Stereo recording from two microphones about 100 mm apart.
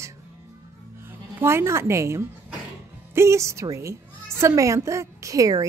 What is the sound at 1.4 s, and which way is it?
A woman's voice, 25° right (ahead or behind).